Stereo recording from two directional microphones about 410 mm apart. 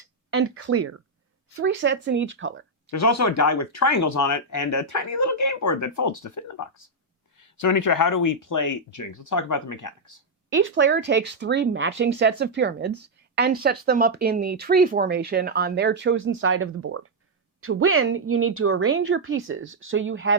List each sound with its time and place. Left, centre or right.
0.3 s speech: right
2.9 s speech: left
7.5 s speech: left
10.5 s speech: right